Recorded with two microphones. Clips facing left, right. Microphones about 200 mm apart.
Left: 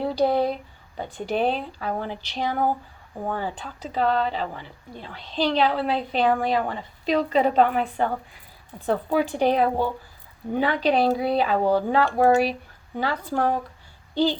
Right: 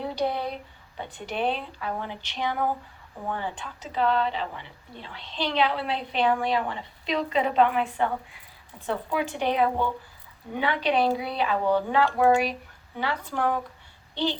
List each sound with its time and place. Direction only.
0.2 s speech: 40° left (ahead or behind)